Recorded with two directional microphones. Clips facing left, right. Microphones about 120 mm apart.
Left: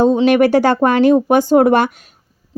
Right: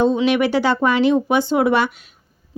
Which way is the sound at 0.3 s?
45° left (ahead or behind).